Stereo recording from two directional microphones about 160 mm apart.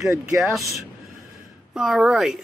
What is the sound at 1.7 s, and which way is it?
Speech, 5° right (ahead or behind).